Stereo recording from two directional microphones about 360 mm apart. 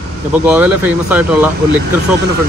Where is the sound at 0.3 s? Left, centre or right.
Centre.